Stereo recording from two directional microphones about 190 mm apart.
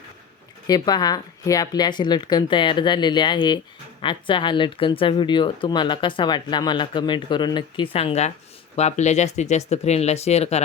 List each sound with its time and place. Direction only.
0.7 s speech: 20° left (ahead or behind)